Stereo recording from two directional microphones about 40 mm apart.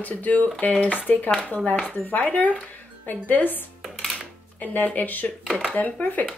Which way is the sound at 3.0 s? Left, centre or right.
Left.